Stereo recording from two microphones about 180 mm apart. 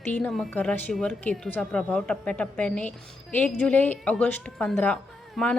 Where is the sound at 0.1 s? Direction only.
5° left (ahead or behind).